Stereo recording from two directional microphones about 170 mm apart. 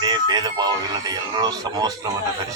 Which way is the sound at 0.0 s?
25° right (ahead or behind).